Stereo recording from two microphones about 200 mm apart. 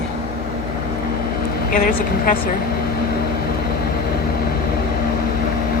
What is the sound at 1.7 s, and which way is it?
Speech, 45° left (ahead or behind).